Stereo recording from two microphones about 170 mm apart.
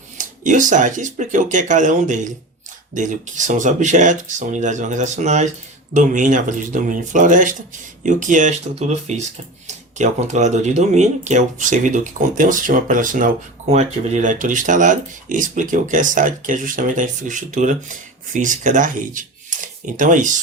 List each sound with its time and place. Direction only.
0.2 s speech: 45° right (ahead or behind)